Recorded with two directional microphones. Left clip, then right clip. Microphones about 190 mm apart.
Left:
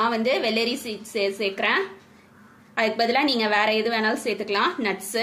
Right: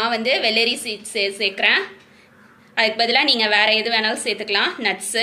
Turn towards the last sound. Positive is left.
turn(degrees=50)  # may be behind; listen again after turning